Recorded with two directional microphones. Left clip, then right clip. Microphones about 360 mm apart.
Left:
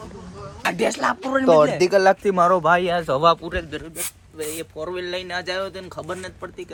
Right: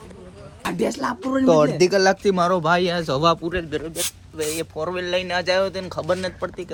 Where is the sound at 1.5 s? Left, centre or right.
Centre.